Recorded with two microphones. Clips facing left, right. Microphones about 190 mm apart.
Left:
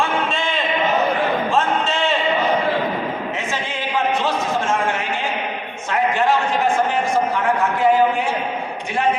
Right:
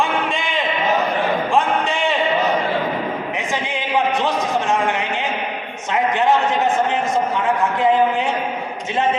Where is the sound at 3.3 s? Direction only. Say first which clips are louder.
Right 2 dB; 15° right (ahead or behind).